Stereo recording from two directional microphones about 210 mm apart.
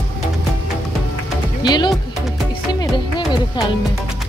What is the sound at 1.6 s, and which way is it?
Music, 20° left (ahead or behind).